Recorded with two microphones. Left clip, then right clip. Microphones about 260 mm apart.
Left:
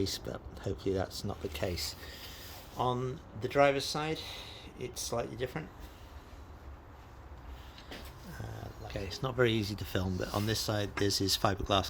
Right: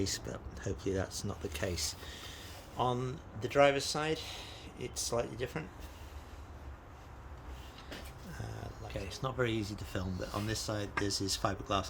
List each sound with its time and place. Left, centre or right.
0.0 s speech: centre
8.9 s speech: centre